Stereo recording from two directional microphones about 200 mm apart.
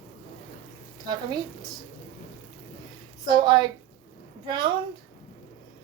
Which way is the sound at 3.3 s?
20° right (ahead or behind).